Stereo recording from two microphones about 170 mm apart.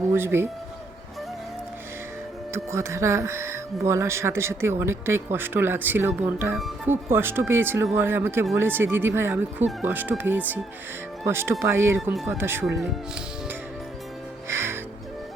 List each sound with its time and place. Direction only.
0.1 s speech: 15° right (ahead or behind)
2.5 s speech: 15° right (ahead or behind)
14.4 s music: 15° right (ahead or behind)